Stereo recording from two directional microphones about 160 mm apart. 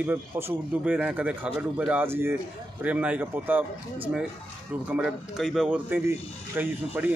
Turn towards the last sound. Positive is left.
turn(degrees=-10)  # may be behind; listen again after turning